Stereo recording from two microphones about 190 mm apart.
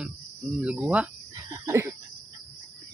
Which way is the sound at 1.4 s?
15° right (ahead or behind).